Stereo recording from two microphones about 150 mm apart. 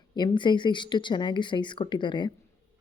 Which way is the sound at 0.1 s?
30° left (ahead or behind).